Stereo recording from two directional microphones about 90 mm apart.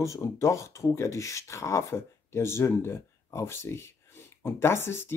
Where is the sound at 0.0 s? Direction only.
35° left (ahead or behind).